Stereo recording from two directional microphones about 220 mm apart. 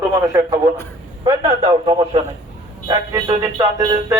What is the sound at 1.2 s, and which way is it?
Music, 25° right (ahead or behind).